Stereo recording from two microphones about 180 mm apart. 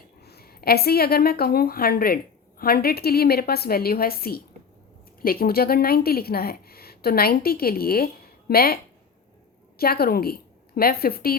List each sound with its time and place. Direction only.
0.2 s a woman's voice: 60° left (ahead or behind)